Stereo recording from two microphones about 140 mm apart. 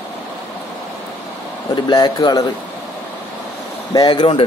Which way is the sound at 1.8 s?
30° left (ahead or behind).